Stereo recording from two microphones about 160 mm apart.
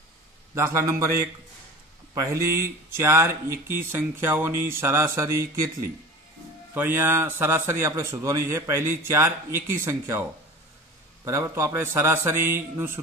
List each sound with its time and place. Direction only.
0.6 s speech: 20° right (ahead or behind)
11.2 s speech: 20° right (ahead or behind)